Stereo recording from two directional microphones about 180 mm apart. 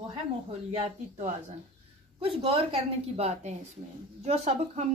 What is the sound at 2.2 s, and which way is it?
Speech, 30° right (ahead or behind).